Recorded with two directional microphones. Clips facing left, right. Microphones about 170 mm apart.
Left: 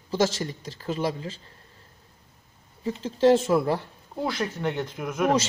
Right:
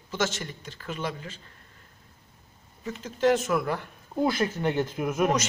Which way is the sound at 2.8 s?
30° left (ahead or behind).